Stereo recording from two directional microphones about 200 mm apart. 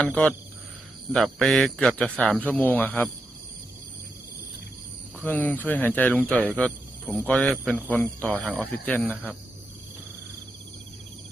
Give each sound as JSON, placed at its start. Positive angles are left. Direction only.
{"t": 0.0, "sound": "speech", "side_deg": 5}
{"t": 5.2, "sound": "speech", "side_deg": 10}